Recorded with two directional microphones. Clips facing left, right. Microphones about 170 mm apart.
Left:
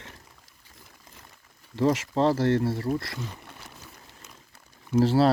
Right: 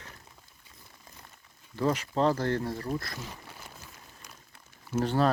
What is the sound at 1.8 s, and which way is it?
Speech, 25° left (ahead or behind).